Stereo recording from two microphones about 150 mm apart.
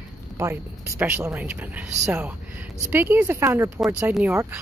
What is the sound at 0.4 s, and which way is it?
A woman's voice, 15° right (ahead or behind).